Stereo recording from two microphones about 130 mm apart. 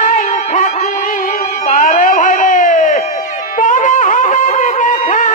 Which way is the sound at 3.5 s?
85° left.